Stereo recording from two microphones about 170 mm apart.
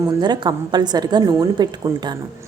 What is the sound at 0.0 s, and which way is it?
A woman's voice, 25° right (ahead or behind).